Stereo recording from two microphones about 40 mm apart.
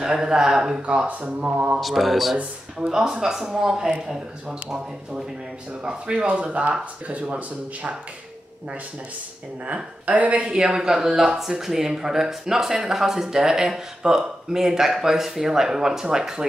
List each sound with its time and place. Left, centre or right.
0.0 s speech: centre
0.8 s speech: right
1.8 s speech: centre
2.9 s speech: centre
6.2 s speech: right
10.0 s speech: right
10.4 s speech: right